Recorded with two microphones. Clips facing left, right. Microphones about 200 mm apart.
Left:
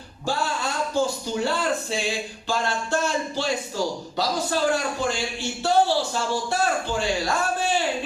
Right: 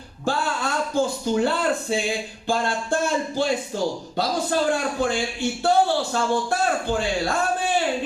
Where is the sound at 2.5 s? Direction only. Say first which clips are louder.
Right 2 dB; 55° right (ahead or behind).